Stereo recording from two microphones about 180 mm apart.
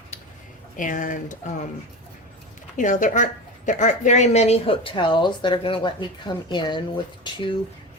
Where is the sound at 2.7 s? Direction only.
45° left (ahead or behind); by 6.8 s 25° left (ahead or behind).